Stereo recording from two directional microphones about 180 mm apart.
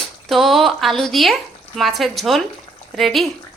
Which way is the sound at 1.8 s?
Centre (ahead or behind).